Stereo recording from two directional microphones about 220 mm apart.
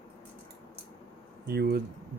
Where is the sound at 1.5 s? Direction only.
45° right (ahead or behind).